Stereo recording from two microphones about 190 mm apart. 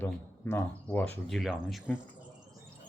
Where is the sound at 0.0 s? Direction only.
10° left (ahead or behind).